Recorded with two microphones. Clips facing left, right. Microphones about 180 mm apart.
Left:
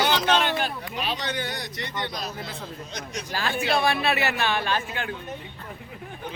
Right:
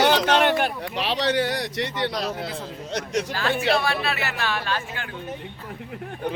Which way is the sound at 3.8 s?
20° left (ahead or behind).